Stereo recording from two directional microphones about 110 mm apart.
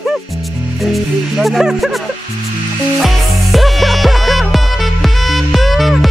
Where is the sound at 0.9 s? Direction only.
Centre (ahead or behind).